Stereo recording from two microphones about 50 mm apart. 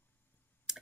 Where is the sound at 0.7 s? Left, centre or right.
Centre.